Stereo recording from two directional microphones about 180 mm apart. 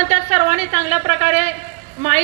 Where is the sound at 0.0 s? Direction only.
35° right (ahead or behind).